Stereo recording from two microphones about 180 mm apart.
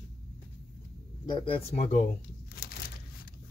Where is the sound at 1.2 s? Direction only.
25° left (ahead or behind).